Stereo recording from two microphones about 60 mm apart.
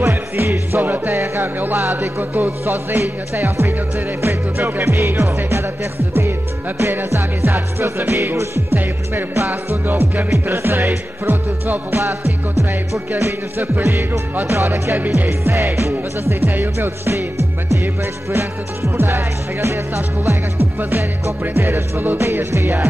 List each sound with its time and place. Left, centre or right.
0.0 s music: right
4.8 s speech: right
6.8 s music: right
9.7 s music: right
13.8 s music: right
18.3 s music: right
21.5 s music: right